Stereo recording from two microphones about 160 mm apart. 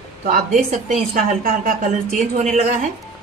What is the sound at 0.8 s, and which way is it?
A woman's voice, 60° right (ahead or behind).